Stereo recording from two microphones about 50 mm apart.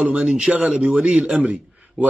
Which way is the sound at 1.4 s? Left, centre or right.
Right.